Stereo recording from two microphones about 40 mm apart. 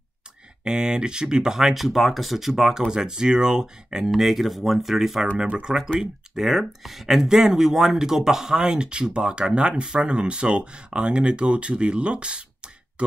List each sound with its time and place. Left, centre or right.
0.7 s speech: right
1.7 s speech: centre
4.1 s speech: centre
5.6 s speech: centre
5.9 s speech: centre
8.7 s speech: right